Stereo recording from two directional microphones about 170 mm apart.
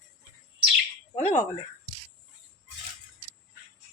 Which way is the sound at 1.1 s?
35° left (ahead or behind).